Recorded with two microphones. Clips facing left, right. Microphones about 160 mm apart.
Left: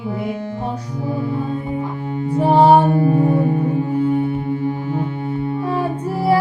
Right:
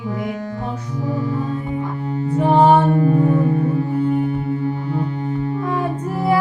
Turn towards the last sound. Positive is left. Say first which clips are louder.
# left 2 dB
turn(degrees=30)  # may be behind; listen again after turning